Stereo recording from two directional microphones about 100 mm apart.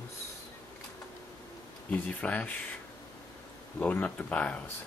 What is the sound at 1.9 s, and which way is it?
Speech, 15° left (ahead or behind).